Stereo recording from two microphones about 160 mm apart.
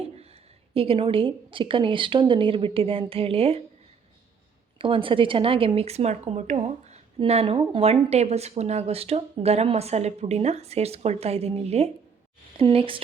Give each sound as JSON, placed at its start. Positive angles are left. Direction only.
{"t": 0.7, "sound": "speech", "side_deg": -35}
{"t": 4.8, "sound": "speech", "side_deg": -35}